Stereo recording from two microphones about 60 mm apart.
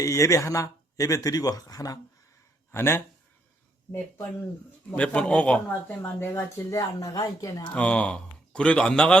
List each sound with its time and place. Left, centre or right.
0.0 s speech: left
2.7 s speech: left
4.9 s speech: left
6.0 s speech: left
6.7 s speech: left
7.7 s speech: left